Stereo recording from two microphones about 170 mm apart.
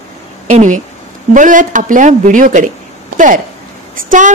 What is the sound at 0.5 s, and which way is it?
A woman's voice, 45° right (ahead or behind).